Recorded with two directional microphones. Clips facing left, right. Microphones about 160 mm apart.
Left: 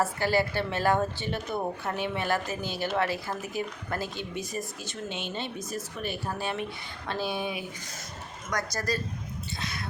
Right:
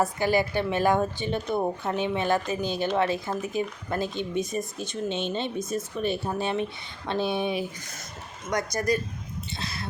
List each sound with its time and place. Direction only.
0.0 s a woman's voice: 15° right (ahead or behind)
9.6 s vehicle: 30° right (ahead or behind)